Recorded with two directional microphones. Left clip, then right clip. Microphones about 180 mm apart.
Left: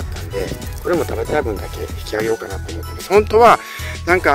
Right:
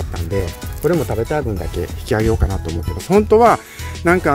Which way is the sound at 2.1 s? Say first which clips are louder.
Right 1 dB; centre (ahead or behind).